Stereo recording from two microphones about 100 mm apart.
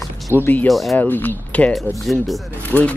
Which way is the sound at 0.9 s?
20° left (ahead or behind).